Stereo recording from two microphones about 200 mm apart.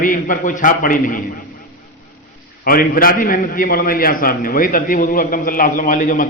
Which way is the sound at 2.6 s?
45° left (ahead or behind).